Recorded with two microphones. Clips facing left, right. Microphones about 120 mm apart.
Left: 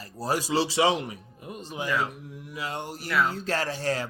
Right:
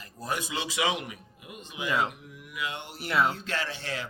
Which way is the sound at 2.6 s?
40° left (ahead or behind).